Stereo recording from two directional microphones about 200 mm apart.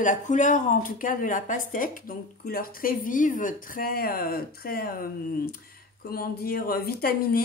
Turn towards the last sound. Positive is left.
turn(degrees=45)  # may be behind; listen again after turning